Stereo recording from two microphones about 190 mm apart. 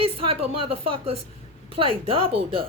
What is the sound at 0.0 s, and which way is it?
Speech, 30° right (ahead or behind).